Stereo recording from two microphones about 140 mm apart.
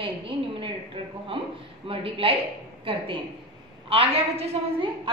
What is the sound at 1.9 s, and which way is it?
A woman's voice, 40° right (ahead or behind).